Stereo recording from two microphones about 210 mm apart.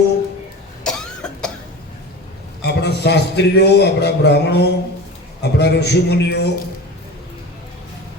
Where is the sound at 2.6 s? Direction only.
55° left (ahead or behind).